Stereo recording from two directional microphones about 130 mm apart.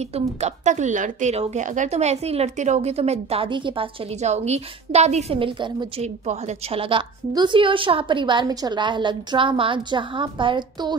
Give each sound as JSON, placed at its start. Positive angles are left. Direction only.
{"t": 0.1, "sound": "a woman's voice", "side_deg": -55}
{"t": 4.2, "sound": "a woman's voice", "side_deg": -60}
{"t": 5.4, "sound": "a woman's voice", "side_deg": -40}
{"t": 6.2, "sound": "a woman's voice", "side_deg": -55}